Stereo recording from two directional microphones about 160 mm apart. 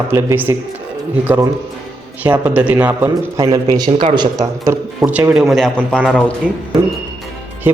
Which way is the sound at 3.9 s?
35° right (ahead or behind).